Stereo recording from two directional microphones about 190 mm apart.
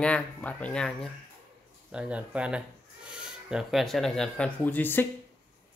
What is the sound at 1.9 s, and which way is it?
Speech, 5° right (ahead or behind).